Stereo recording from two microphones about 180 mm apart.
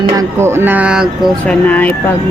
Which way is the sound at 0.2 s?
15° right (ahead or behind).